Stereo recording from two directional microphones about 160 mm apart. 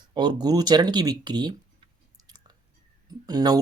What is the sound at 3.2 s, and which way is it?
Speech, 25° right (ahead or behind).